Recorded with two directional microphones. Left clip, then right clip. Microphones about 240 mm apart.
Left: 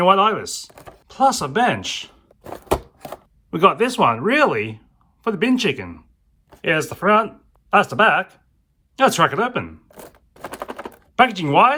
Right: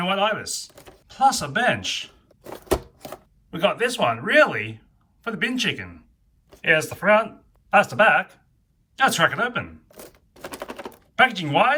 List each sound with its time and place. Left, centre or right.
0.0 s speech: centre
9.0 s a sound: centre
10.5 s typing: centre